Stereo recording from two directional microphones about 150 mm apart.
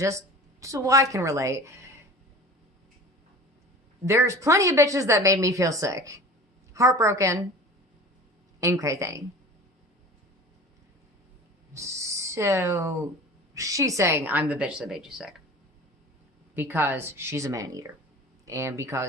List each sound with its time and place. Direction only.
0.0 s speech: 20° right (ahead or behind)
4.0 s speech: 15° right (ahead or behind)
8.6 s speech: 20° right (ahead or behind)
11.7 s a woman's voice: 20° right (ahead or behind); by 15.4 s 5° right (ahead or behind)
16.6 s a woman's voice: 15° right (ahead or behind)